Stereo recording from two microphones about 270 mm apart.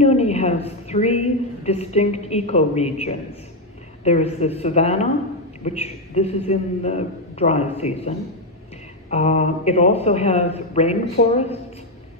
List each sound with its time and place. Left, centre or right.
0.0 s a woman's voice: left
9.1 s a man's voice: left